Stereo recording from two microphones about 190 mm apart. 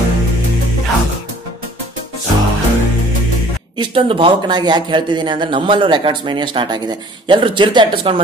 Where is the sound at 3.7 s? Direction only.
30° right (ahead or behind).